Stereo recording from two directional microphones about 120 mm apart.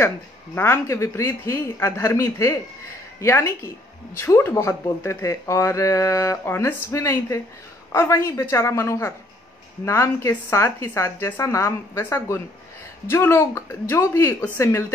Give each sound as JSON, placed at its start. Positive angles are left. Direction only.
{"t": 0.6, "sound": "speech", "side_deg": 20}